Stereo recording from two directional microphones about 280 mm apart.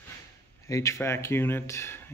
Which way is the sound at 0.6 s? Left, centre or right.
Centre.